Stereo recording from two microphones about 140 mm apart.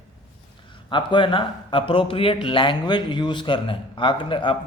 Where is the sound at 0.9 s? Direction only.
35° left (ahead or behind).